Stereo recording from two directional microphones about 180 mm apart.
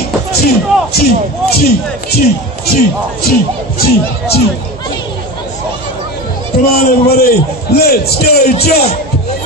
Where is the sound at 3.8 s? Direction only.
60° left (ahead or behind).